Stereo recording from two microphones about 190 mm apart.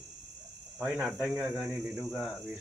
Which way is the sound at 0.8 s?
10° right (ahead or behind).